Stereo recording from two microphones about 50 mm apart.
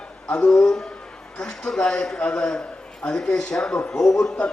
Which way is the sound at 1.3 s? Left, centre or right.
Centre.